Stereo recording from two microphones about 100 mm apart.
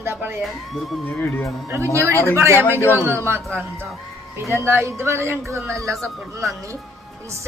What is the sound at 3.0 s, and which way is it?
Speech, 25° right (ahead or behind).